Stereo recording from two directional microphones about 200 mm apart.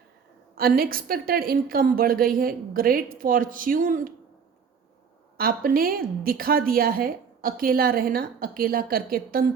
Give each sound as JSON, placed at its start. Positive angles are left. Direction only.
{"t": 0.5, "sound": "a woman's voice", "side_deg": -50}
{"t": 5.4, "sound": "a woman's voice", "side_deg": -45}